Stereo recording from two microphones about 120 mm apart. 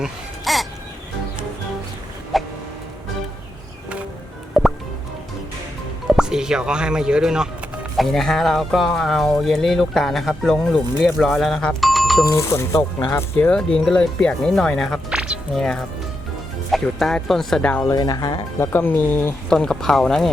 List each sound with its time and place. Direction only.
0.0 s baby cry: centre (ahead or behind)
2.3 s chicken: centre (ahead or behind)
4.6 s music: centre (ahead or behind)
6.1 s speech: 5° right (ahead or behind)
12.2 s speech: 25° left (ahead or behind)
13.4 s speech: 10° left (ahead or behind)
15.1 s music: 5° right (ahead or behind)
16.7 s speech: centre (ahead or behind)
17.9 s speech: 35° left (ahead or behind)
18.6 s speech: 15° left (ahead or behind)
19.5 s speech: 5° left (ahead or behind)